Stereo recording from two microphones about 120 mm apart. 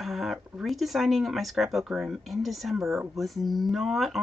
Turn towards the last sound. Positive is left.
turn(degrees=0)  # may be behind; listen again after turning